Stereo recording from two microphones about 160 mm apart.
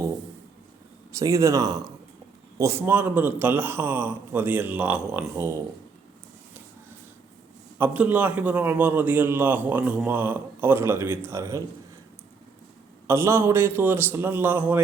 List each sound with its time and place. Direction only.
1.1 s a man's voice: 20° right (ahead or behind)
7.8 s a man's voice: 10° right (ahead or behind)
13.1 s a man's voice: 15° right (ahead or behind)